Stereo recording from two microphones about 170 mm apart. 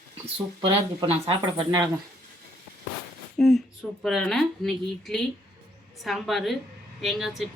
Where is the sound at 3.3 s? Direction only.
Centre (ahead or behind).